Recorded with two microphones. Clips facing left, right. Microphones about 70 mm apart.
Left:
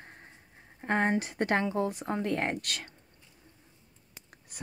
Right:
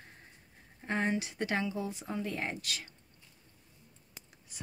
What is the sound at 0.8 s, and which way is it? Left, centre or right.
Speech, left.